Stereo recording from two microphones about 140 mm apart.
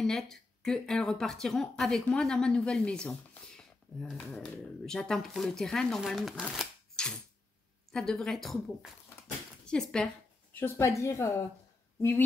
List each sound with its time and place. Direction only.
0.0 s speech: 5° left (ahead or behind)
6.4 s shuffling cards: 5° left (ahead or behind)
7.9 s speech: 5° left (ahead or behind)
10.5 s a woman's voice: 15° left (ahead or behind)